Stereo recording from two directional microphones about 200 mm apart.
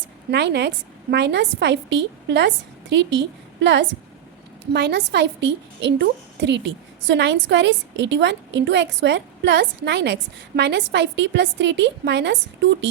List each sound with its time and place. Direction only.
0.3 s a woman's voice: 60° right (ahead or behind)